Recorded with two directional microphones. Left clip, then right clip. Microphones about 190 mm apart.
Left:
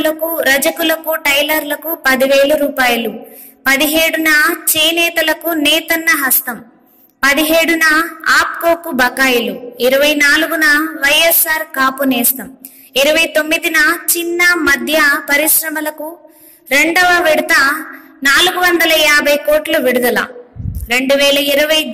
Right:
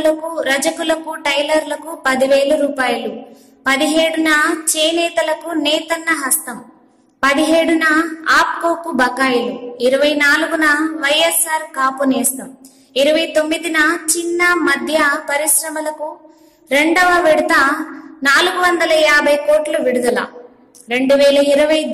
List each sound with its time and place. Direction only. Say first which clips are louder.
0.0 s a woman's voice: left 2 dB; 10° left (ahead or behind)